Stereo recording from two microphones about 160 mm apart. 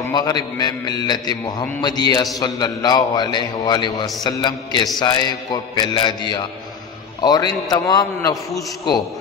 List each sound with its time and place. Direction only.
0.1 s a man's voice: 25° left (ahead or behind)